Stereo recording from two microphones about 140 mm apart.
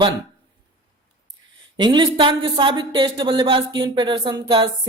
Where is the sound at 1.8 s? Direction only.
35° right (ahead or behind).